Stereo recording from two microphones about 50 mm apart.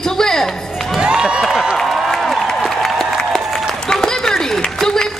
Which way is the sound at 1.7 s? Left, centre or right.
Centre.